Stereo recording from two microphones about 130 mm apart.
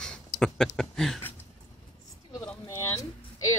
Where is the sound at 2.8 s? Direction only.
25° left (ahead or behind).